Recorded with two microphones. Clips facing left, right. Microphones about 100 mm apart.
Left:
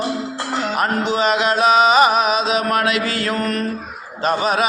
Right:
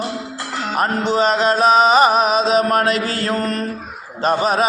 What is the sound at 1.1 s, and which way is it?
Mantra, 35° right (ahead or behind).